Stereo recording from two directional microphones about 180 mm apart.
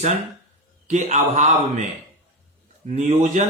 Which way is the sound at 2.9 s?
40° right (ahead or behind).